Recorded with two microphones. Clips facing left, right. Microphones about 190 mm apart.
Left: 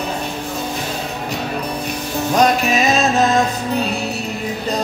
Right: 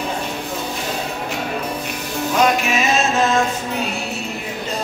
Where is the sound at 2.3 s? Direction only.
35° left (ahead or behind).